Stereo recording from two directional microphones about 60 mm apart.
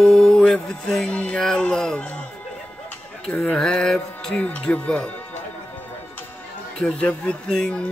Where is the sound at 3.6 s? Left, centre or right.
Centre.